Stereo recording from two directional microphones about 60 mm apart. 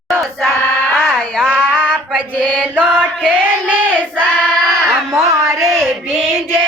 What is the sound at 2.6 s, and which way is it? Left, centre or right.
Chant, right.